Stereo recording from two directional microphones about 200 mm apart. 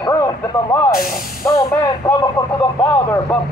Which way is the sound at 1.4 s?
15° left (ahead or behind).